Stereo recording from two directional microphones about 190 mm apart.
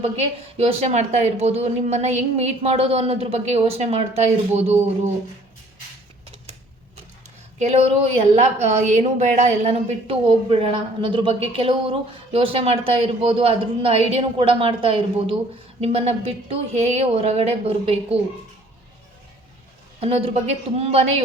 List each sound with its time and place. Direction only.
0.5 s speech: 35° right (ahead or behind)
7.6 s speech: 35° right (ahead or behind)
20.0 s speech: 30° right (ahead or behind)